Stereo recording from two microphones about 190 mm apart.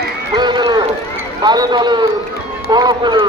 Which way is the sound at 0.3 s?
25° right (ahead or behind).